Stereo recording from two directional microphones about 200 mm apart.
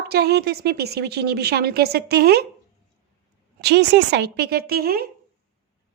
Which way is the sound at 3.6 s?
55° right (ahead or behind).